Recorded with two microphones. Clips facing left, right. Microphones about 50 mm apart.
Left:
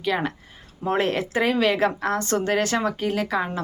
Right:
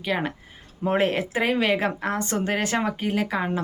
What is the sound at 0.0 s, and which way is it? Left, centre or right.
Speech, centre.